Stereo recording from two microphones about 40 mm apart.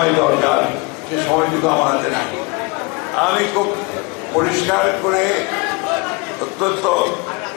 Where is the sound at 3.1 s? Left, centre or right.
Centre.